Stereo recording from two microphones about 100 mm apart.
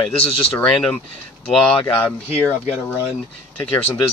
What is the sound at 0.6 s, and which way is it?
Speech, 10° left (ahead or behind).